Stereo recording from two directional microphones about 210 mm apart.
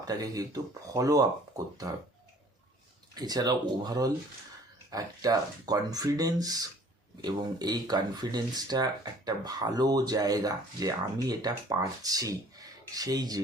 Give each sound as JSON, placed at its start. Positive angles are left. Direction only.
{"t": 0.0, "sound": "speech", "side_deg": -15}
{"t": 3.2, "sound": "speech", "side_deg": -20}